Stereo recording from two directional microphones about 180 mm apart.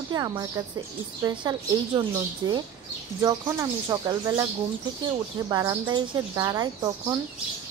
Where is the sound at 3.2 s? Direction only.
20° right (ahead or behind).